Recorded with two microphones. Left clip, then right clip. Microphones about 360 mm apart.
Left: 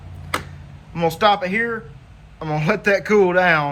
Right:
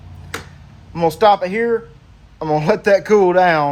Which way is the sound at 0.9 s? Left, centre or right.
Right.